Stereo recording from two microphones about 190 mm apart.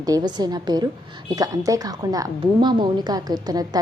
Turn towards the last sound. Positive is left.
turn(degrees=-20)  # may be behind; listen again after turning